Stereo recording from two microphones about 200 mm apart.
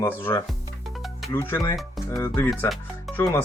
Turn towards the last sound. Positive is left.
turn(degrees=15)  # may be behind; listen again after turning